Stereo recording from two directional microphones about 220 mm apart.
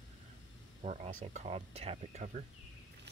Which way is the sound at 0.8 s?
35° right (ahead or behind).